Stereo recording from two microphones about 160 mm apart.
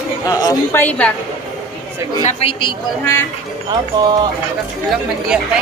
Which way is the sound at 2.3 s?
35° left (ahead or behind).